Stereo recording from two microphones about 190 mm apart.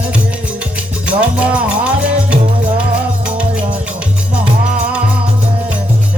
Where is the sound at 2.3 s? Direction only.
30° right (ahead or behind).